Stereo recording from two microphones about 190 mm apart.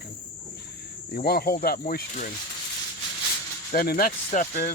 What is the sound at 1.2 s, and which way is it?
Speech, 55° left (ahead or behind).